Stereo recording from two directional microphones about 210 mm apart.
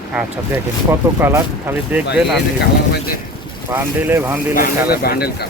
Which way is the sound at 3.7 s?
10° right (ahead or behind).